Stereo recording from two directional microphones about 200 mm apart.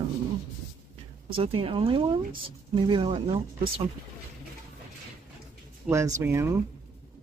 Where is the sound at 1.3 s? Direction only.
25° right (ahead or behind).